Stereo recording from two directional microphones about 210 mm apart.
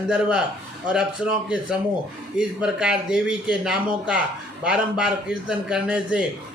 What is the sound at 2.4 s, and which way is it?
Speech, 5° right (ahead or behind).